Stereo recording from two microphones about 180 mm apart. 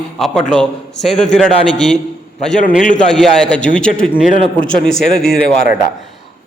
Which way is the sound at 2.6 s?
45° left (ahead or behind).